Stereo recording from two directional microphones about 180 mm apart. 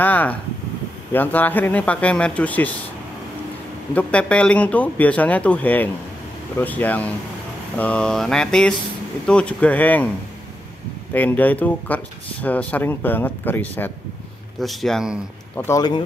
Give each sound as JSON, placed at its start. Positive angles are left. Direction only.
{"t": 0.0, "sound": "speech", "side_deg": 10}
{"t": 3.9, "sound": "speech", "side_deg": 5}
{"t": 7.7, "sound": "mantra", "side_deg": 5}
{"t": 9.3, "sound": "speech", "side_deg": 5}
{"t": 11.1, "sound": "speech", "side_deg": 10}
{"t": 14.6, "sound": "mantra", "side_deg": 0}
{"t": 15.6, "sound": "speech", "side_deg": 20}